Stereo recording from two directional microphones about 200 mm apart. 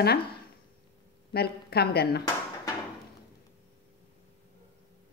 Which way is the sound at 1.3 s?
55° left (ahead or behind).